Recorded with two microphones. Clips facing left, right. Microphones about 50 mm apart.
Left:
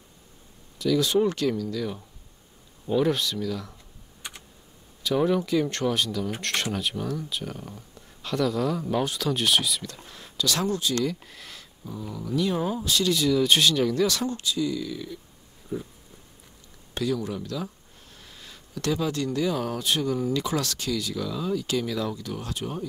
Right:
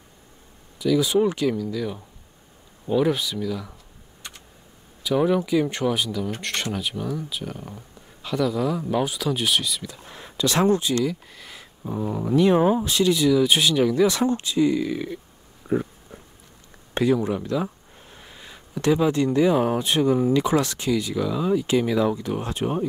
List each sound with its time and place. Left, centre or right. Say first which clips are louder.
0.7 s speech: right 2 dB; centre
4.2 s computer keyboard: left 1 dB; centre
5.0 s speech: right 3 dB; centre
10.0 s speech: right 4 dB; right
11.1 s speech: right 2 dB; centre
11.8 s speech: right 9 dB; right
15.7 s a sound: right 9 dB; right
16.9 s speech: right 7 dB; right